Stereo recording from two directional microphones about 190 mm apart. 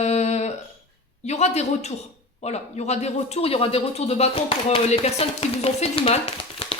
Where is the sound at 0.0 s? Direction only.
35° left (ahead or behind).